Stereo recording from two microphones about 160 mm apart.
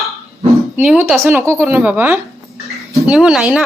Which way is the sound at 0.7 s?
10° right (ahead or behind).